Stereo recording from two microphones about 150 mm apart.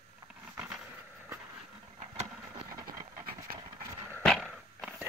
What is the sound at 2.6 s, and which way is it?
Vehicle, 25° right (ahead or behind).